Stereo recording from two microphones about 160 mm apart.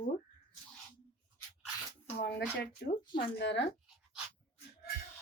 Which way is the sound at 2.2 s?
90° left.